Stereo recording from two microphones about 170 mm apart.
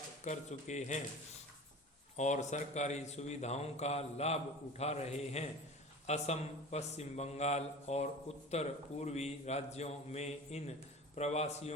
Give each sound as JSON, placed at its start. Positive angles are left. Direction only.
{"t": 0.3, "sound": "speech", "side_deg": 45}
{"t": 2.1, "sound": "speech", "side_deg": 45}